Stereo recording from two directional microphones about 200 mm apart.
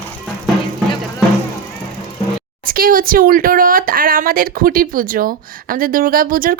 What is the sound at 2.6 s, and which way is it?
Speech, 45° right (ahead or behind).